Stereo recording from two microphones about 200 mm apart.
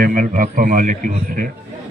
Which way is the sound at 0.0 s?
40° right (ahead or behind).